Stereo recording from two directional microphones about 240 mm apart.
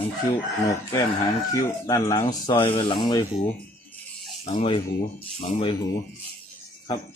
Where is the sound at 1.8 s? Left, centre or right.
Centre.